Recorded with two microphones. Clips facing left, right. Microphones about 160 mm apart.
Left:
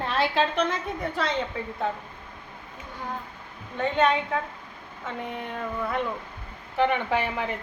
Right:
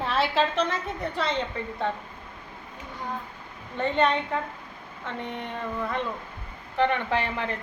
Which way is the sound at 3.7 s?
Centre (ahead or behind).